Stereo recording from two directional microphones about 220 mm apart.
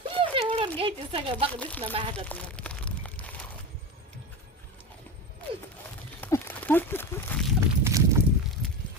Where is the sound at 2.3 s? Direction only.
5° left (ahead or behind).